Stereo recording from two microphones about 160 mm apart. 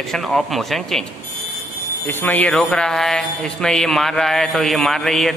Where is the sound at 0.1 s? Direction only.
Centre (ahead or behind).